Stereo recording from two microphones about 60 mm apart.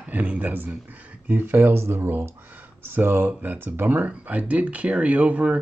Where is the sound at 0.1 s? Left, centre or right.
Right.